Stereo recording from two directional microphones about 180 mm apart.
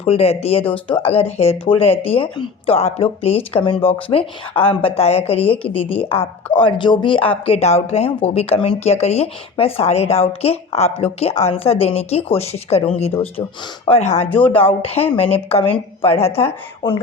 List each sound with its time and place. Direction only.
0.0 s speech: 35° left (ahead or behind)